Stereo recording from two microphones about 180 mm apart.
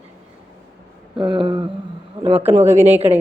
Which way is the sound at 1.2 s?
30° right (ahead or behind).